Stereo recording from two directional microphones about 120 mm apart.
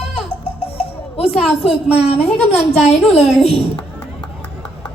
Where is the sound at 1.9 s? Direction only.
60° left (ahead or behind).